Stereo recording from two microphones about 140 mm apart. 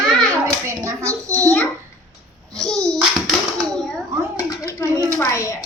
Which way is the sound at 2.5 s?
5° left (ahead or behind).